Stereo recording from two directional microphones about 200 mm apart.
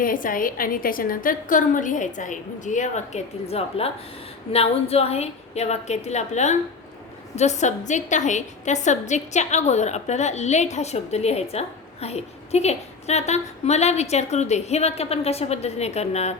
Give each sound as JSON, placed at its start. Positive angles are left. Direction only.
{"t": 0.0, "sound": "a woman's voice", "side_deg": 45}